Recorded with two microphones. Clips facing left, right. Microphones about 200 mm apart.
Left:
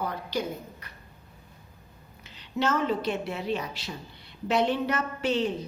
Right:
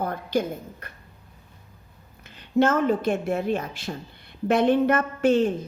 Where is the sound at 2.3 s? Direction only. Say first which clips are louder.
Right 7 dB; 50° right (ahead or behind).